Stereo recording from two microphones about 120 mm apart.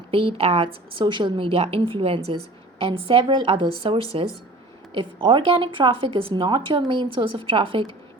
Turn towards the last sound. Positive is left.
turn(degrees=-45)  # may be behind; listen again after turning